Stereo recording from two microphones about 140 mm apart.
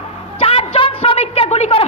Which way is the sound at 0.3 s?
45° left (ahead or behind).